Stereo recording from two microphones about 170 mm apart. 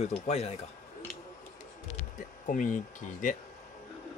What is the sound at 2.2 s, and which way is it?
Speech, 50° left (ahead or behind).